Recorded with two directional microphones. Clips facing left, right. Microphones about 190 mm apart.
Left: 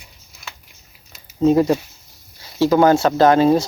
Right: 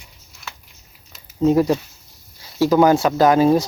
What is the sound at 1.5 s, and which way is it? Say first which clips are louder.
Speech: left 1 dB; 20° left (ahead or behind).